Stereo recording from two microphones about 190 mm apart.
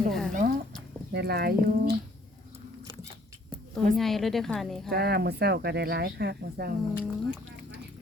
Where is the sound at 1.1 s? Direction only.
55° right (ahead or behind).